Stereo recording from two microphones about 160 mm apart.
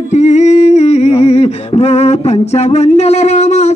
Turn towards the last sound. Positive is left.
turn(degrees=45)  # may be behind; listen again after turning